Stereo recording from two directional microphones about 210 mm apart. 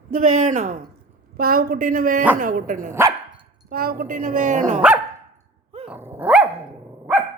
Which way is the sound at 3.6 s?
45° right (ahead or behind).